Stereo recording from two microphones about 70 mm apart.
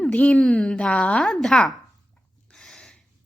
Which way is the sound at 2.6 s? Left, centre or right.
Centre.